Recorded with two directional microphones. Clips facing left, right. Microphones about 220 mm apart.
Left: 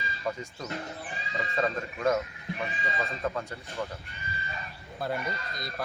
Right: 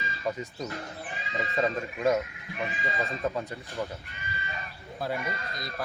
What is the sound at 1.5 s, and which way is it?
Speech, 15° right (ahead or behind).